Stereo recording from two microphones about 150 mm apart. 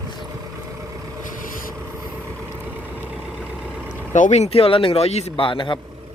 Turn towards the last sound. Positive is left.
turn(degrees=35)  # may be behind; listen again after turning